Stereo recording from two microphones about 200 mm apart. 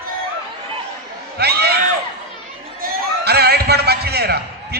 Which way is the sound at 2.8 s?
55° right (ahead or behind).